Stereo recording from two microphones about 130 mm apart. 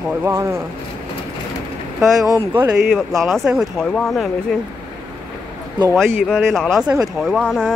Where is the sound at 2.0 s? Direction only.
5° right (ahead or behind).